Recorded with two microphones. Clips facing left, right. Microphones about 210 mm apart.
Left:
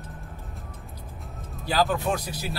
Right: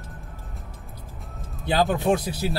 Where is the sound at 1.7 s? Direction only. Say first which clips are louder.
Right 3 dB; 25° right (ahead or behind).